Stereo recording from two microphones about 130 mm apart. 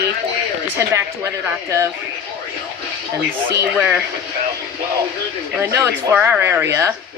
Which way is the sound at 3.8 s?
10° right (ahead or behind).